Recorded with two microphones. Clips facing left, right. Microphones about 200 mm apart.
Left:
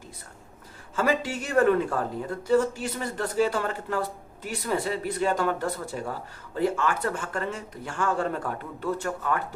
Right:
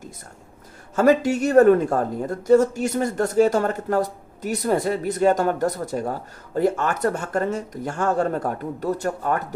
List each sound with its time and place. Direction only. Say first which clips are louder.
0.9 s speech: right 9 dB; 45° right (ahead or behind)